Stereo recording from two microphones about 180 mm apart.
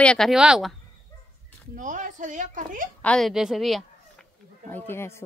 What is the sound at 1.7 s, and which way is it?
Speech, 45° right (ahead or behind).